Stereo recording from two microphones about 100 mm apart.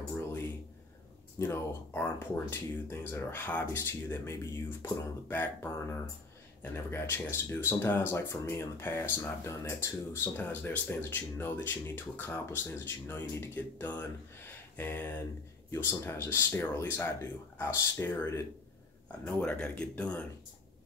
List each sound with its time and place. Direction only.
1.4 s speech: 25° left (ahead or behind)
19.0 s speech: 15° left (ahead or behind)